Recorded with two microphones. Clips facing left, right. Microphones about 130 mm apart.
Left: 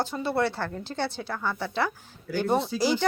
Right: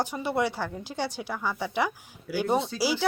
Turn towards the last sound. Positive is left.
turn(degrees=-10)  # may be behind; listen again after turning